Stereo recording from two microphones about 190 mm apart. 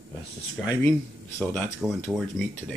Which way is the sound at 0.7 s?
10° left (ahead or behind).